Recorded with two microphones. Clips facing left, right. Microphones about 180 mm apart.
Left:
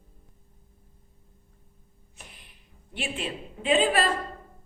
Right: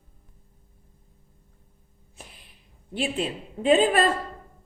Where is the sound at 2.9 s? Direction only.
40° right (ahead or behind).